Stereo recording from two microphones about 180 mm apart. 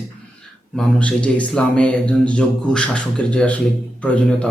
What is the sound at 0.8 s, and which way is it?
Speech, 5° left (ahead or behind).